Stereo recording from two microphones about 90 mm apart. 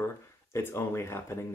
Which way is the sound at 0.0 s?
25° left (ahead or behind).